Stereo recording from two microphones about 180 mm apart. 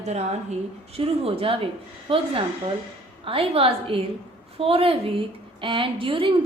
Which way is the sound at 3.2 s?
30° right (ahead or behind).